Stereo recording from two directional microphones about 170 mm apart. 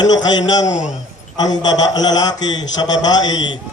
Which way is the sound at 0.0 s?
25° left (ahead or behind).